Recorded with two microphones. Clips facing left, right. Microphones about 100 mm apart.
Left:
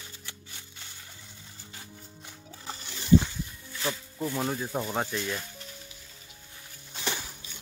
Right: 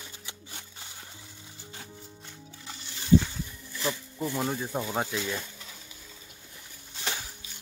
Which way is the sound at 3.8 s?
Centre (ahead or behind).